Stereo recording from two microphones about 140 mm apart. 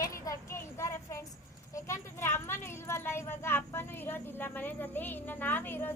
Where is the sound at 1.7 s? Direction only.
20° left (ahead or behind).